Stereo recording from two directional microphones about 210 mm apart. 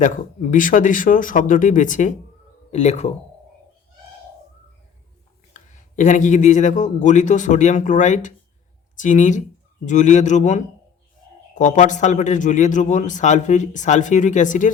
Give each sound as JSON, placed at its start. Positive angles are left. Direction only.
{"t": 0.0, "sound": "a man's voice", "side_deg": 40}
{"t": 5.5, "sound": "a man's voice", "side_deg": 35}